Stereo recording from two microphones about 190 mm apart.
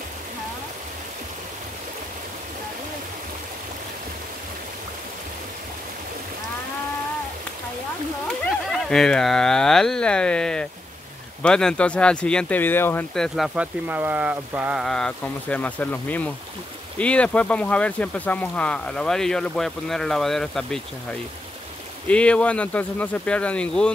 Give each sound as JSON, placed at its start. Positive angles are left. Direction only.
{"t": 8.3, "sound": "speech", "side_deg": 5}
{"t": 22.0, "sound": "speech", "side_deg": 5}